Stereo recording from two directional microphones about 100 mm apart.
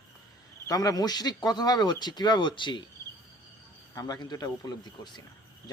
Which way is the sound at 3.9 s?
40° left (ahead or behind).